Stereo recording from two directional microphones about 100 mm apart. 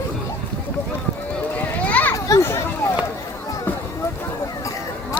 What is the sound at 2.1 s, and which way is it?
Children playing, 30° left (ahead or behind).